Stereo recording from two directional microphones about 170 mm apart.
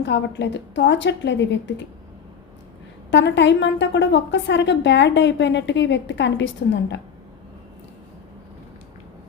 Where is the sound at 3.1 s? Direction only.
90° left.